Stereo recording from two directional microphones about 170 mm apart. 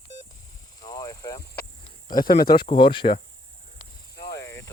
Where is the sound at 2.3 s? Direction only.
60° left (ahead or behind).